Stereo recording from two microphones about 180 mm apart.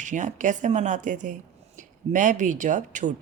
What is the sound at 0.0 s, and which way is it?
A woman's voice, 45° right (ahead or behind).